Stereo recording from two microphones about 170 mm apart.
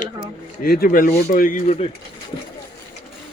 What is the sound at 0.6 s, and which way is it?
Speech, 65° left (ahead or behind).